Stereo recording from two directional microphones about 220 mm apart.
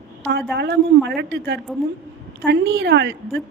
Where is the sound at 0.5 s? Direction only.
50° right (ahead or behind).